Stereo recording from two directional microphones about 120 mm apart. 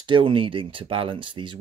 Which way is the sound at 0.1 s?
45° right (ahead or behind).